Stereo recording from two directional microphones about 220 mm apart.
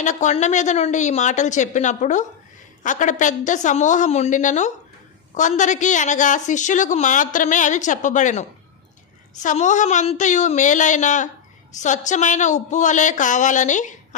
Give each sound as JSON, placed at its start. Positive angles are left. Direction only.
{"t": 0.0, "sound": "a woman's voice", "side_deg": 35}